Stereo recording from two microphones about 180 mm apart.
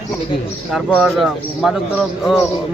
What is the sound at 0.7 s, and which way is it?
A man's voice, centre (ahead or behind).